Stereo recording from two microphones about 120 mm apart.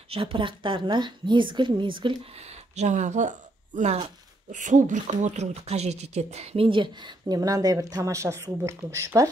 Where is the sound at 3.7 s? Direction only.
70° right (ahead or behind).